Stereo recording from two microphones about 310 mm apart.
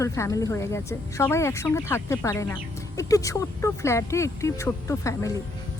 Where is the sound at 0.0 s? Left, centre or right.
Centre.